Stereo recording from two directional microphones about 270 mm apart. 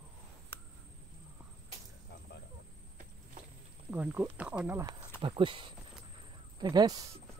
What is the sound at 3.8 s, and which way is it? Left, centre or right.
Speech, centre.